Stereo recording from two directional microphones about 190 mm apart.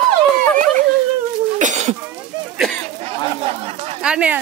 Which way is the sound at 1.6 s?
40° right (ahead or behind).